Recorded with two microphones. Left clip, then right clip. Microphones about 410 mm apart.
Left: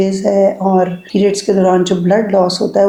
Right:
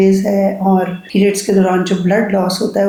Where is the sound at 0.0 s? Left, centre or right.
Left.